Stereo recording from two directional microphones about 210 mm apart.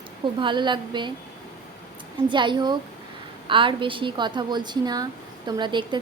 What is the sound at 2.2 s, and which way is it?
Speech, 20° right (ahead or behind).